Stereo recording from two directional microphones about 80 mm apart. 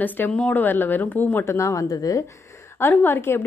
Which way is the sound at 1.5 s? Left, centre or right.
Left.